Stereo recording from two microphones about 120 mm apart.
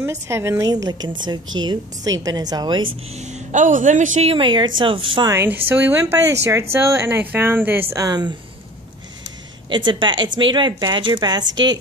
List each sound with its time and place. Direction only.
0.0 s a woman's voice: 25° right (ahead or behind)
3.2 s a man's voice: 85° right
4.3 s a woman's voice: 45° right (ahead or behind)
5.3 s a woman's voice: 20° right (ahead or behind)
7.9 s a woman's voice: 30° right (ahead or behind)
9.7 s a woman's voice: 40° right (ahead or behind)